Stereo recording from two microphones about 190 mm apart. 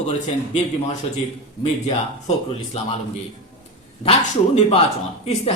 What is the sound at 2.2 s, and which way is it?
Speech, 30° left (ahead or behind).